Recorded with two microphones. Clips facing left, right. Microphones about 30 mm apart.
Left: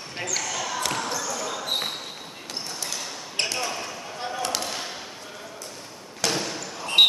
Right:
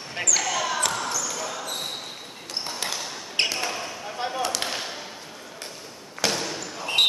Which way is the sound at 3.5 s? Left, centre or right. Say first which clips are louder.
Even; centre.